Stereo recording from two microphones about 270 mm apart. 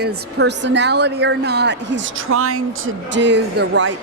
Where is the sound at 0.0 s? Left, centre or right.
Right.